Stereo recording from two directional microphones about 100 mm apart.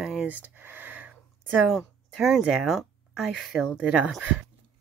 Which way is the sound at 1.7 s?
5° right (ahead or behind).